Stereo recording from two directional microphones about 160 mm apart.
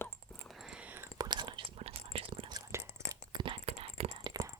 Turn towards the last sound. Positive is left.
turn(degrees=-35)  # may be behind; listen again after turning